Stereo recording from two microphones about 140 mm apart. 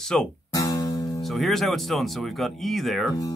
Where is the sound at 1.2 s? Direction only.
Centre (ahead or behind).